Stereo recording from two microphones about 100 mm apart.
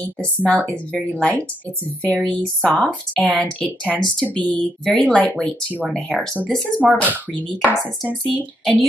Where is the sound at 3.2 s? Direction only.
Centre (ahead or behind).